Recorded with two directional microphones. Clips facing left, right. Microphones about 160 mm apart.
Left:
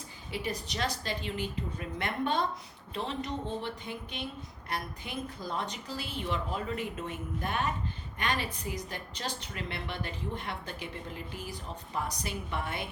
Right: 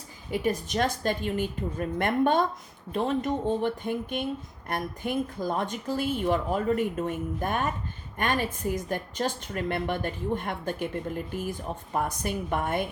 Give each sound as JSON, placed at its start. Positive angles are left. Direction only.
{"t": 0.3, "sound": "a woman's voice", "side_deg": -50}